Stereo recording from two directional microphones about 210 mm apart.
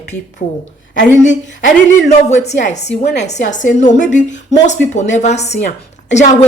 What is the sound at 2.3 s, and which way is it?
A man's voice, 35° left (ahead or behind).